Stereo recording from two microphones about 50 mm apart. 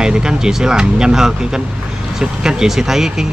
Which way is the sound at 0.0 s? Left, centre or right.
Centre.